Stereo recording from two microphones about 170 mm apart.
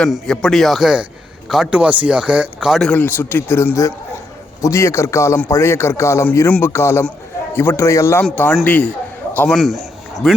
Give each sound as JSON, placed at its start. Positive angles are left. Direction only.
{"t": 0.0, "sound": "a man's voice", "side_deg": 5}